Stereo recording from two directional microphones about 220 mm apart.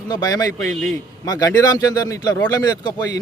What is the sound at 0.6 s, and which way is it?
Speech, centre (ahead or behind).